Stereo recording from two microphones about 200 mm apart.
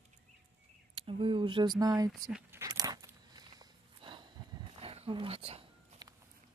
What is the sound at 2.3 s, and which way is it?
Dog, 15° right (ahead or behind).